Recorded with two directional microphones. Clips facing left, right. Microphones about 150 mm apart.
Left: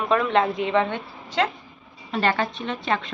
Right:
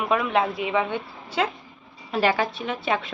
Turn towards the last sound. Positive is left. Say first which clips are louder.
# even
turn(degrees=-5)  # may be behind; listen again after turning